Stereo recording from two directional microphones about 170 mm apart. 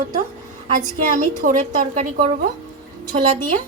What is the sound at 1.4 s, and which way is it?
Speech, 50° right (ahead or behind).